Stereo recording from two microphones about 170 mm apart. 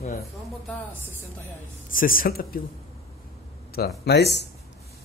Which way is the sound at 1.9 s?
55° left (ahead or behind).